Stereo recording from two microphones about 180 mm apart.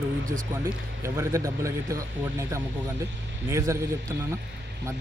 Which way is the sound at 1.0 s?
15° right (ahead or behind).